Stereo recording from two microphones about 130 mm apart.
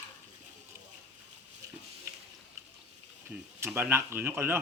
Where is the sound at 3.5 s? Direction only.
15° right (ahead or behind).